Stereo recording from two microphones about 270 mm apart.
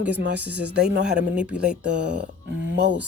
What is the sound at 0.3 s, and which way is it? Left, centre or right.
Speech, centre.